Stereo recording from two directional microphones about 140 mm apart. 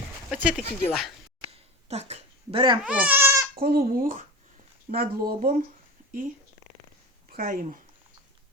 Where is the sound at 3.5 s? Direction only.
90° right.